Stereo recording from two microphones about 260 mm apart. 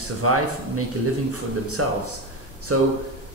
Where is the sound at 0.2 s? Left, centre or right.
Right.